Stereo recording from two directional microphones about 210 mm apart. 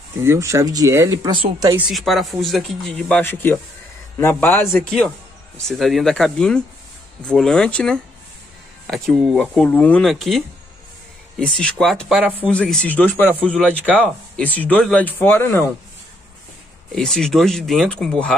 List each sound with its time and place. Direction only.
0.2 s speech: 15° right (ahead or behind)
1.9 s speech: centre (ahead or behind)
16.9 s speech: centre (ahead or behind)